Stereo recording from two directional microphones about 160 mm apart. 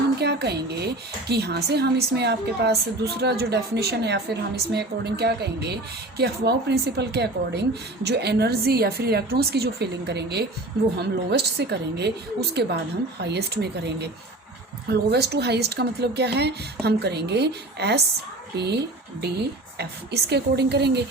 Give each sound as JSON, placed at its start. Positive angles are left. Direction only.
{"t": 0.2, "sound": "a woman's voice", "side_deg": -90}